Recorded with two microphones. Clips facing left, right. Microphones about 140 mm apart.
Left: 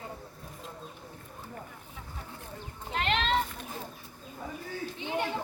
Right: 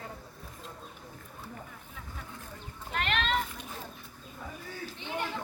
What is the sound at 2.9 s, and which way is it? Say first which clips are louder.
Children playing: left 2 dB; 30° left (ahead or behind).